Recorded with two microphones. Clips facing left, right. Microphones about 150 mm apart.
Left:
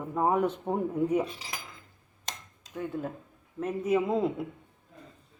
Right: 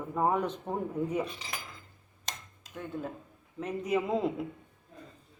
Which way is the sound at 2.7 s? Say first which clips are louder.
Left 4 dB; 5° left (ahead or behind).